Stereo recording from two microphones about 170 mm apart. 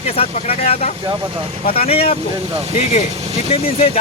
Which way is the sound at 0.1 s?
35° left (ahead or behind).